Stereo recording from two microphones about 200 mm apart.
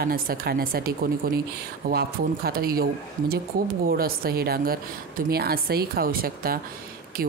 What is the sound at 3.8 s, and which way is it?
Speech, 50° right (ahead or behind).